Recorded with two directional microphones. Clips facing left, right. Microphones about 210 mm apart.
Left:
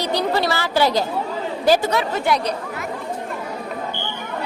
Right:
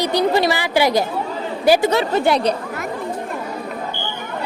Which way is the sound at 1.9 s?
30° right (ahead or behind).